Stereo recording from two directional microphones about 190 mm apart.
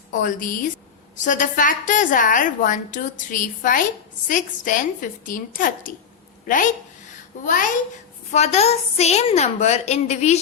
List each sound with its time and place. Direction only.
0.1 s a woman's voice: 45° left (ahead or behind)
8.3 s a woman's voice: 35° left (ahead or behind)